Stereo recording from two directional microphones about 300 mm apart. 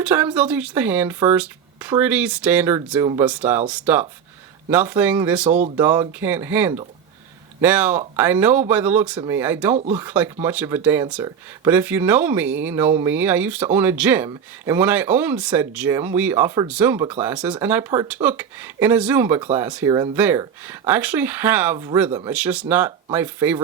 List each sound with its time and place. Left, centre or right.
0.0 s speech: centre
5.5 s speech: right
5.7 s speech: centre